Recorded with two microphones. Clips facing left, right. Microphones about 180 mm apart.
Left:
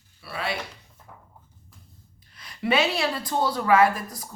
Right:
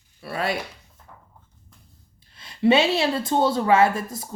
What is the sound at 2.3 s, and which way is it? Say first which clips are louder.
A woman's voice: right 6 dB; 25° right (ahead or behind).